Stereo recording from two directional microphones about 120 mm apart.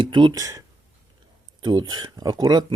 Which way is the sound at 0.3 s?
25° right (ahead or behind).